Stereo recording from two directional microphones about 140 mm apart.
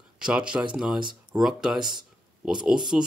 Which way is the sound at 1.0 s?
35° right (ahead or behind).